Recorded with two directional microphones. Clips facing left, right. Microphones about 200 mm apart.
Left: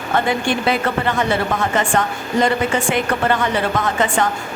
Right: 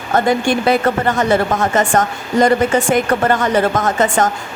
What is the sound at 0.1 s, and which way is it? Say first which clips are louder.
A woman's voice: right 4 dB; 40° right (ahead or behind).